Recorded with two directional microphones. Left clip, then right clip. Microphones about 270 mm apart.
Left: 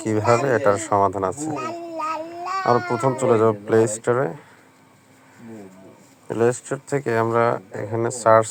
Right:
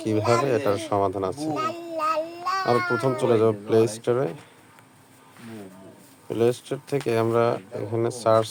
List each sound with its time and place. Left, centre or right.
0.4 s speech: centre
1.5 s child singing: centre
2.6 s speech: centre
6.2 s speech: centre